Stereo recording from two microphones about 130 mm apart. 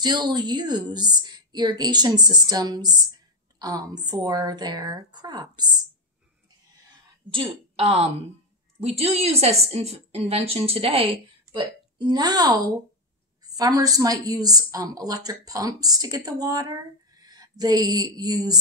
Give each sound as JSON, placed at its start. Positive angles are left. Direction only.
{"t": 0.0, "sound": "a woman's voice", "side_deg": -35}
{"t": 7.2, "sound": "a woman's voice", "side_deg": -50}